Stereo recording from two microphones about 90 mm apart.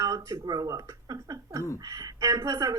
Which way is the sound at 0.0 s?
40° right (ahead or behind).